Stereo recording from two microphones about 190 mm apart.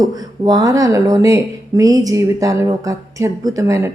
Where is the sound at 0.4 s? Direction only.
20° right (ahead or behind).